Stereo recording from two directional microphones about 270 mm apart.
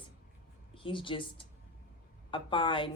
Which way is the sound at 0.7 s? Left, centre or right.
Centre.